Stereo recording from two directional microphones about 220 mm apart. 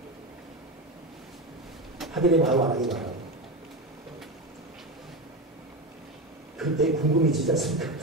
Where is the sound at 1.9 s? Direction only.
Centre (ahead or behind).